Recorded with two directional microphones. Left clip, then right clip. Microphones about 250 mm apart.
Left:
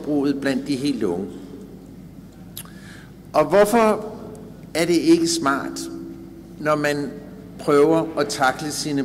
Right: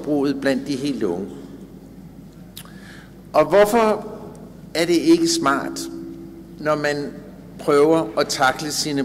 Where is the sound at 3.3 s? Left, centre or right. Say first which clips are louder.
Right 1 dB; centre.